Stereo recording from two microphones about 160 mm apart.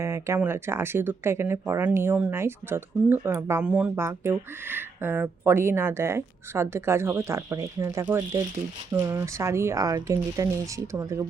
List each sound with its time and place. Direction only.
0.0 s speech: 15° right (ahead or behind)